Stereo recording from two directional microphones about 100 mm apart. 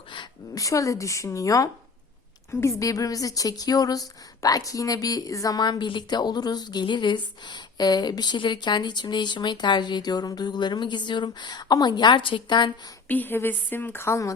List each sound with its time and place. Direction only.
0.5 s a woman's voice: 35° left (ahead or behind)
13.1 s a woman's voice: 20° left (ahead or behind)